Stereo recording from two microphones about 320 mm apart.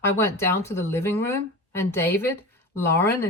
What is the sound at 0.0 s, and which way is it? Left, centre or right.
Speech, centre.